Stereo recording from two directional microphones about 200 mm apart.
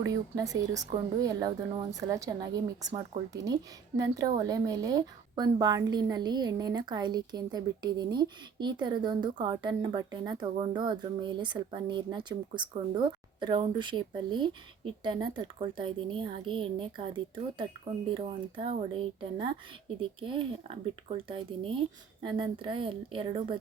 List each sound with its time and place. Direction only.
0.0 s a woman's voice: 15° right (ahead or behind)